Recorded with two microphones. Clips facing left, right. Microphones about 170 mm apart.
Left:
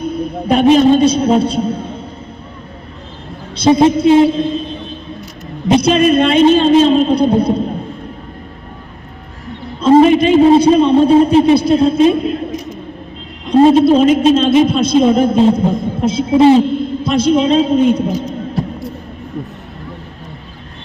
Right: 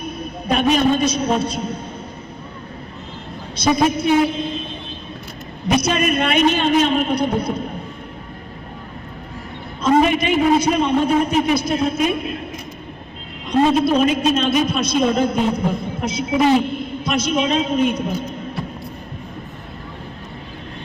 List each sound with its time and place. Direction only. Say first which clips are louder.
0.0 s a man's voice: left 9 dB; 30° left (ahead or behind)
3.5 s a man's voice: left 7 dB; 30° left (ahead or behind)
5.6 s a man's voice: left 8 dB; 30° left (ahead or behind)
9.8 s a man's voice: left 8 dB; 30° left (ahead or behind)
13.5 s a man's voice: left 8 dB; 30° left (ahead or behind)